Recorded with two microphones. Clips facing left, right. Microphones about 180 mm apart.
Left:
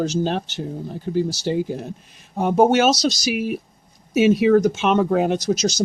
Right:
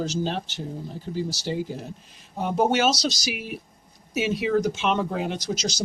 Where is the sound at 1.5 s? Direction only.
55° left (ahead or behind).